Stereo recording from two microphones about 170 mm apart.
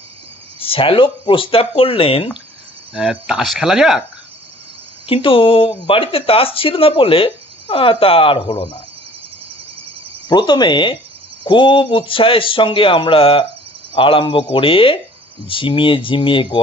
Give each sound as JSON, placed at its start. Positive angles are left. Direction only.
{"t": 0.6, "sound": "speech", "side_deg": 35}
{"t": 2.9, "sound": "speech", "side_deg": -5}
{"t": 5.0, "sound": "speech", "side_deg": 30}
{"t": 10.2, "sound": "speech", "side_deg": 25}